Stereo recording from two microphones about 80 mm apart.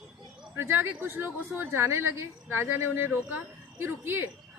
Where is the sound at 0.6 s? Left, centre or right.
Right.